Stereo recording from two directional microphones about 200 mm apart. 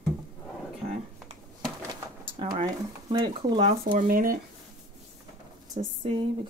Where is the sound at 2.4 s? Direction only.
20° right (ahead or behind).